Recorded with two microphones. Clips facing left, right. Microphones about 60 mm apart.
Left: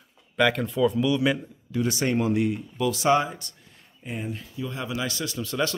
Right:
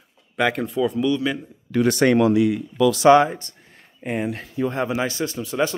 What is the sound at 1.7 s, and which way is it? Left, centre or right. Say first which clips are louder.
Speech: right 8 dB; right.